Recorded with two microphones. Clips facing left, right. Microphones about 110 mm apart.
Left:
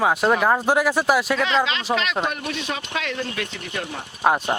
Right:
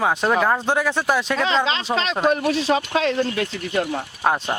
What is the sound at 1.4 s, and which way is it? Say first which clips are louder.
Speech: right 1 dB; 30° right (ahead or behind).